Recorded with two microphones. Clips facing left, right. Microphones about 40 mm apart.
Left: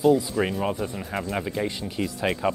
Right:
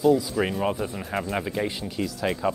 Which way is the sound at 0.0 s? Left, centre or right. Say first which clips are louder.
Even; centre.